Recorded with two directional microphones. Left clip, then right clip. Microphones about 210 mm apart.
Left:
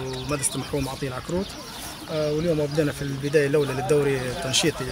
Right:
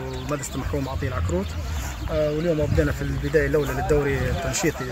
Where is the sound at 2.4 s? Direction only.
10° left (ahead or behind).